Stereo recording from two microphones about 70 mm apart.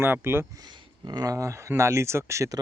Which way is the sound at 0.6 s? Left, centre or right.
Right.